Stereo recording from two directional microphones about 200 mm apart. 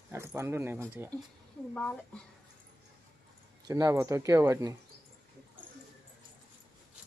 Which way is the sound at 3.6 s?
15° right (ahead or behind).